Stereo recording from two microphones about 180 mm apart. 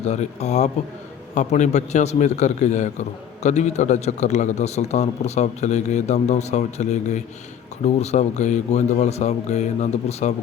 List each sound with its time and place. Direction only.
0.0 s a man's voice: 40° left (ahead or behind)